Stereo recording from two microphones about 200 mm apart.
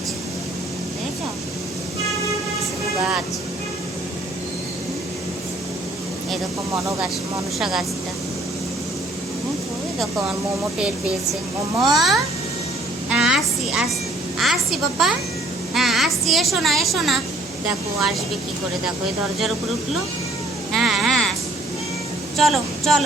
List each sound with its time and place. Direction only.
2.6 s vehicle: 5° right (ahead or behind)
7.6 s speech: centre (ahead or behind)
11.9 s speech: centre (ahead or behind)
13.1 s a sound: 5° right (ahead or behind)
14.3 s a woman's voice: centre (ahead or behind)
20.7 s cat: centre (ahead or behind)
22.4 s speech: centre (ahead or behind)